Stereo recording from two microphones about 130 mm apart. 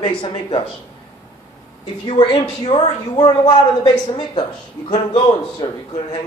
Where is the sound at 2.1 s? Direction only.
35° left (ahead or behind).